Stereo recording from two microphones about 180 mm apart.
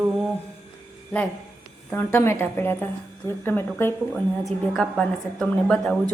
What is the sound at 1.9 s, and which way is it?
A woman's voice, 10° left (ahead or behind).